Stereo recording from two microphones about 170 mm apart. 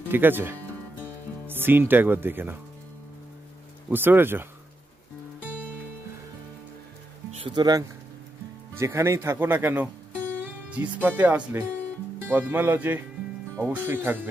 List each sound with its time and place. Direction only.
0.1 s speech: 10° right (ahead or behind)
3.9 s speech: 10° right (ahead or behind)
7.2 s speech: 30° right (ahead or behind); by 14.3 s 15° right (ahead or behind)